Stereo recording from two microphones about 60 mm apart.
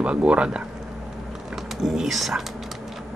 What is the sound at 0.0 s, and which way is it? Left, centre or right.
Speech, centre.